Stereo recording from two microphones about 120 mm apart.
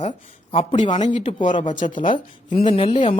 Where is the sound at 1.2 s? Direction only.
50° left (ahead or behind).